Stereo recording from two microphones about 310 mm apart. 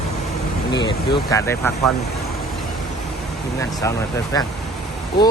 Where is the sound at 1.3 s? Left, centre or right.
Centre.